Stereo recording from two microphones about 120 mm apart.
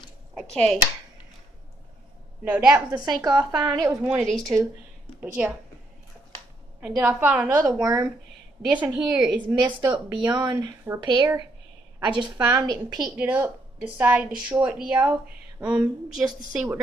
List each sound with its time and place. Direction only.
0.5 s speech: 5° left (ahead or behind)
2.4 s a woman's voice: 10° right (ahead or behind)
2.9 s a woman's voice: 35° right (ahead or behind)
5.2 s a woman's voice: 10° right (ahead or behind)
7.0 s a woman's voice: 15° right (ahead or behind)
7.8 s a woman's voice: 30° right (ahead or behind)
8.7 s a woman's voice: 15° right (ahead or behind)
9.7 s speech: 40° right (ahead or behind)
13.0 s a woman's voice: 15° right (ahead or behind)